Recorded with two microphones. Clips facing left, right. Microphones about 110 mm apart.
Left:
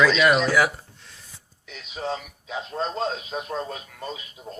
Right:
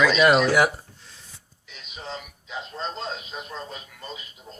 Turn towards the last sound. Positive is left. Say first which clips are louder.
# left 4 dB
turn(degrees=70)  # may be behind; listen again after turning